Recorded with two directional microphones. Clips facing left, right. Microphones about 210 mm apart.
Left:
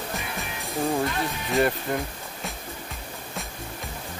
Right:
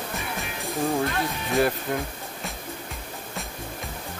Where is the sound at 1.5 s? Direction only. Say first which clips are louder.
Even; centre (ahead or behind).